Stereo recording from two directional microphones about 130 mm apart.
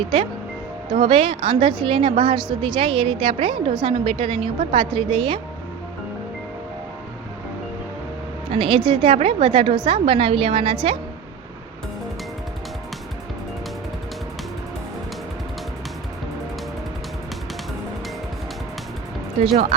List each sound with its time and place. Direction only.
0.9 s a woman's voice: 40° right (ahead or behind)
8.4 s a woman's voice: 45° right (ahead or behind)